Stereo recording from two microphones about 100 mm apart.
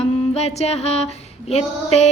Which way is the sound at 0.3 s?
90° left.